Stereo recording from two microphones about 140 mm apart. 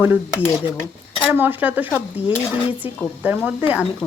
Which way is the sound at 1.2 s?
15° right (ahead or behind).